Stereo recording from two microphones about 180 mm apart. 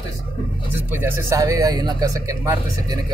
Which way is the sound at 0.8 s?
10° right (ahead or behind).